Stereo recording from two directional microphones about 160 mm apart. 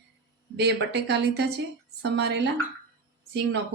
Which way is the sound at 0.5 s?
90° right.